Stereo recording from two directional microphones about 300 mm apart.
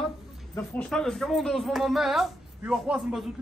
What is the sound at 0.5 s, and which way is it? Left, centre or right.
A man's voice, centre.